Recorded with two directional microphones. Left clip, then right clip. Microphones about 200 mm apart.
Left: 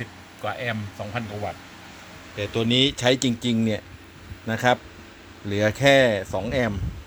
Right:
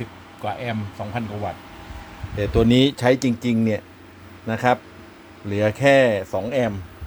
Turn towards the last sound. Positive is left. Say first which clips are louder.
# right 3 dB
turn(degrees=-5)  # may be behind; listen again after turning